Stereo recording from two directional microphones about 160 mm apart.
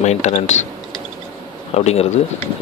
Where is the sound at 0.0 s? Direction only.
45° left (ahead or behind).